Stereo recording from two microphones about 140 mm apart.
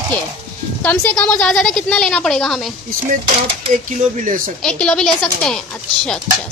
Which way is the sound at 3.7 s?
65° right (ahead or behind).